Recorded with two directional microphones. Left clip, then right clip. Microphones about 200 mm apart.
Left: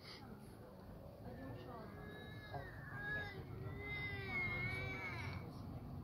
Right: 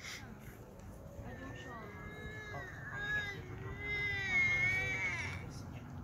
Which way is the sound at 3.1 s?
55° left (ahead or behind).